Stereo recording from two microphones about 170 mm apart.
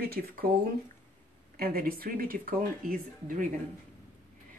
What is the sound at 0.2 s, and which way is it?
Speech, 60° right (ahead or behind).